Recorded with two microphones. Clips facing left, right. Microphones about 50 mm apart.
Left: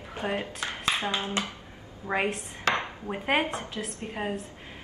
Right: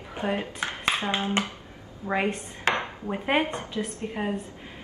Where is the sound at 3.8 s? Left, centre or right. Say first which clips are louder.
Right 4 dB; centre.